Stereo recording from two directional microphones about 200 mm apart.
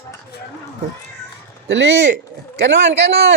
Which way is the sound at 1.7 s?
65° right (ahead or behind).